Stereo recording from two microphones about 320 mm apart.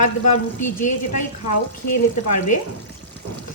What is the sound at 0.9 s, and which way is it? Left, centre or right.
Speech, left.